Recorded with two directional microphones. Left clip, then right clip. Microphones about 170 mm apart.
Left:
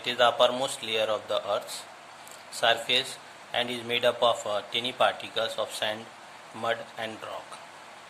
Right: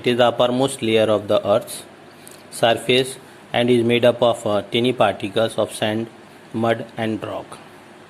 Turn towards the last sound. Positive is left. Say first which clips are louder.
# right 10 dB
turn(degrees=-30)  # may be behind; listen again after turning